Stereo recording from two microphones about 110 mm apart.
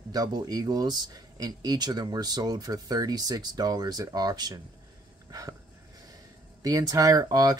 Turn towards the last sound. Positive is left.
turn(degrees=-35)  # may be behind; listen again after turning